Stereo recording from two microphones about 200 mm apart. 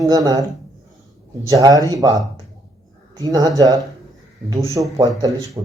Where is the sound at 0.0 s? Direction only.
20° right (ahead or behind).